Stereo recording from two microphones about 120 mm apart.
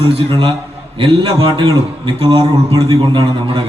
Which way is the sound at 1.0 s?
45° right (ahead or behind).